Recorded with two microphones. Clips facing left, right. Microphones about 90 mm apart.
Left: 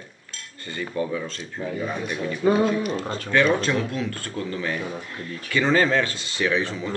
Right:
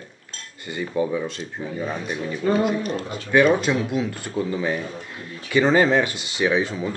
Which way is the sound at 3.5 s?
15° right (ahead or behind).